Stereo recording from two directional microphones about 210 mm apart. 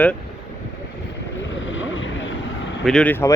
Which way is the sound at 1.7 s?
65° left (ahead or behind).